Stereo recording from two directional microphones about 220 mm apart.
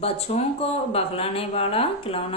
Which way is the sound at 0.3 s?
30° left (ahead or behind).